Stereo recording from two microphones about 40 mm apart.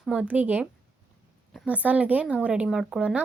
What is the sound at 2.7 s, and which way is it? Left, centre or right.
Speech, centre.